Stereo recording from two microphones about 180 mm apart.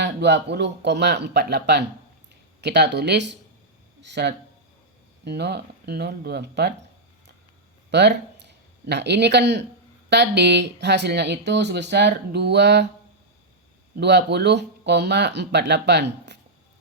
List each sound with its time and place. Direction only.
0.0 s speech: 70° right (ahead or behind)
7.9 s speech: 70° right (ahead or behind)
13.9 s speech: 70° right (ahead or behind)